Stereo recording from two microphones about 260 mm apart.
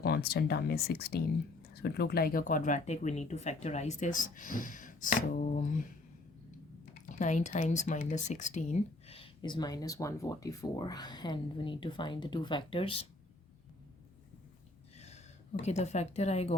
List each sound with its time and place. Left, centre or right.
0.0 s speech: left
7.1 s speech: left
14.9 s a sound: left
15.6 s speech: left